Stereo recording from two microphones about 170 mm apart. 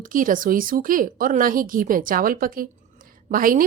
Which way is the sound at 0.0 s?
50° right (ahead or behind).